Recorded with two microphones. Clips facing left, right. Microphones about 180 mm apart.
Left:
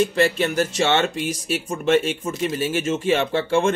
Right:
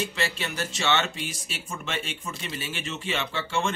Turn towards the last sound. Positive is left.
turn(degrees=55)  # may be behind; listen again after turning